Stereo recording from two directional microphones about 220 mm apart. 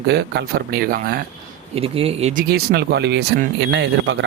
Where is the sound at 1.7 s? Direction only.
25° right (ahead or behind).